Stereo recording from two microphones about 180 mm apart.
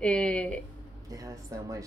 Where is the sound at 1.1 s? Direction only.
20° right (ahead or behind).